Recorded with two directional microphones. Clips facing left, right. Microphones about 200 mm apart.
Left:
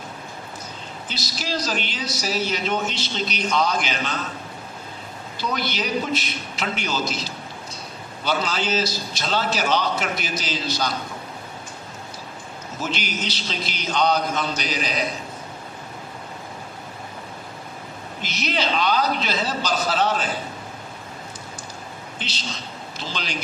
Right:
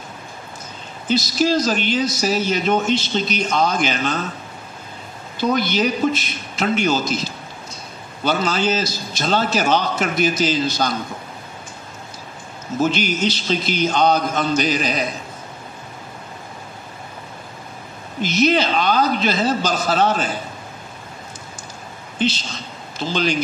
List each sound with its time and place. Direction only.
1.0 s a man's voice: 50° right (ahead or behind)
5.4 s a man's voice: 50° right (ahead or behind)
12.7 s a man's voice: 50° right (ahead or behind)
18.2 s a man's voice: 50° right (ahead or behind)
22.9 s a man's voice: 50° right (ahead or behind)